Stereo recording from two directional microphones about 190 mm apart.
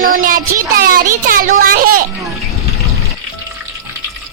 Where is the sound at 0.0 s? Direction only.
45° right (ahead or behind).